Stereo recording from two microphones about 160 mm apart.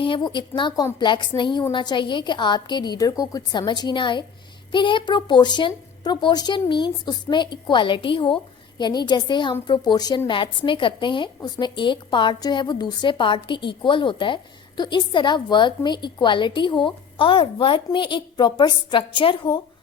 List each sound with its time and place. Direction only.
0.0 s a woman's voice: 30° left (ahead or behind)